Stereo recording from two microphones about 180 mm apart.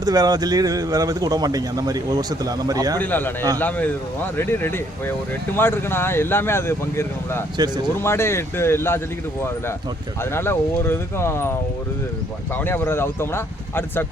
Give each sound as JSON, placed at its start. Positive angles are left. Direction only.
{"t": 0.0, "sound": "speech", "side_deg": -20}
{"t": 3.0, "sound": "speech", "side_deg": 10}
{"t": 10.3, "sound": "speech", "side_deg": 15}
{"t": 12.5, "sound": "speech", "side_deg": 10}